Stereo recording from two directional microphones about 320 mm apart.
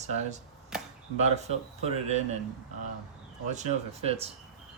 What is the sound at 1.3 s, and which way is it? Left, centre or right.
Speech, centre.